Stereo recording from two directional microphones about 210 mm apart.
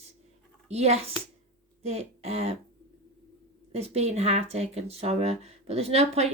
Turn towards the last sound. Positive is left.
turn(degrees=-30)  # may be behind; listen again after turning